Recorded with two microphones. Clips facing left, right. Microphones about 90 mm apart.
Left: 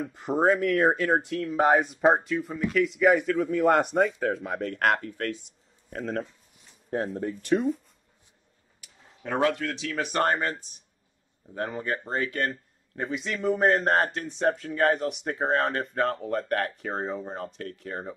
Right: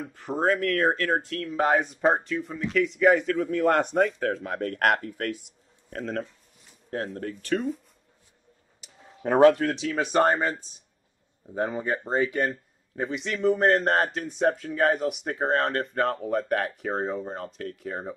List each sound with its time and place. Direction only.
0.1 s a man's voice: 20° left (ahead or behind); by 6.2 s 5° left (ahead or behind)
7.2 s speech: 15° left (ahead or behind)
9.2 s speech: 35° right (ahead or behind)
9.8 s speech: 20° right (ahead or behind)
10.2 s speech: 5° right (ahead or behind)
12.4 s a man's voice: centre (ahead or behind)